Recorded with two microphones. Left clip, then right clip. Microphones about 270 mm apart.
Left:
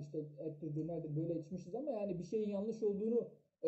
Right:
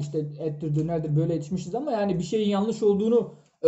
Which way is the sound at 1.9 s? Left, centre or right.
Right.